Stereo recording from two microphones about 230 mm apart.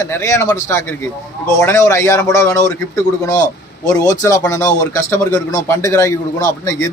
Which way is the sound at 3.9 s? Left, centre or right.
Centre.